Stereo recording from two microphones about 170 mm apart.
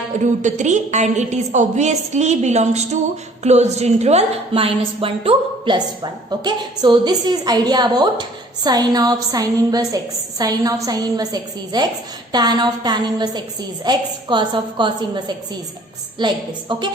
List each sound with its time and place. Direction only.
0.4 s a woman's voice: 45° right (ahead or behind); by 16.9 s 25° right (ahead or behind)